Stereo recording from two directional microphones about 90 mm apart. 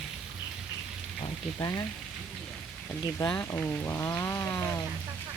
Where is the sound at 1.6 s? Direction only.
40° left (ahead or behind).